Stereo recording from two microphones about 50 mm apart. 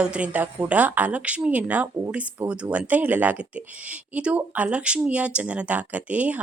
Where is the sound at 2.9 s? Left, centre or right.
Right.